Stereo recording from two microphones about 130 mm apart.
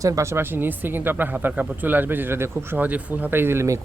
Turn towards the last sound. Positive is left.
turn(degrees=-20)  # may be behind; listen again after turning